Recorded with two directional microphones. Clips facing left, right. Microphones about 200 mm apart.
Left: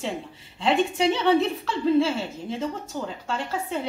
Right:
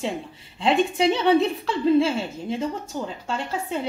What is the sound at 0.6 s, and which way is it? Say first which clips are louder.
Speech: right 2 dB; 15° right (ahead or behind).